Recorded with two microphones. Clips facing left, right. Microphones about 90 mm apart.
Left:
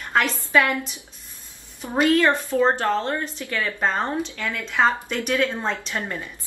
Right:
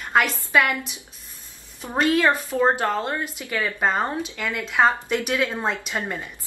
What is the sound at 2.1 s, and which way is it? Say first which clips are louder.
A woman's voice: left 1 dB; 15° right (ahead or behind).